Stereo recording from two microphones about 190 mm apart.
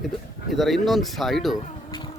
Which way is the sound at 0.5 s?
Centre (ahead or behind).